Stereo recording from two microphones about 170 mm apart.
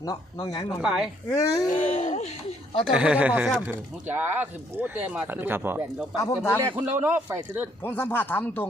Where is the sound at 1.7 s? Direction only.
45° left (ahead or behind).